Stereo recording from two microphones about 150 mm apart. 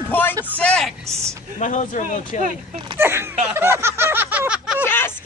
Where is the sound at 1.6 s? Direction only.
55° left (ahead or behind).